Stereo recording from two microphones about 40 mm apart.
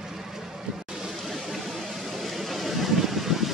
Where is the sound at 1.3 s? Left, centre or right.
Centre.